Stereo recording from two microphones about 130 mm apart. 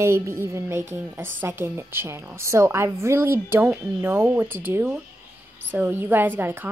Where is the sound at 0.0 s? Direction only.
20° right (ahead or behind).